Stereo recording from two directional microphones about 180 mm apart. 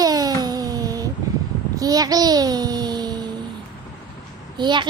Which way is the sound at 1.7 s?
20° right (ahead or behind).